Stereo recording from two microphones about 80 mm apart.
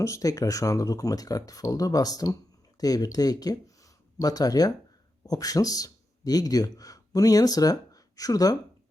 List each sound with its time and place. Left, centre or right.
0.0 s a man's voice: left